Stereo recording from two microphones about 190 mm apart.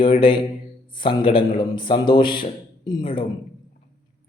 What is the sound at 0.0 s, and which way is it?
A man's voice, 25° left (ahead or behind).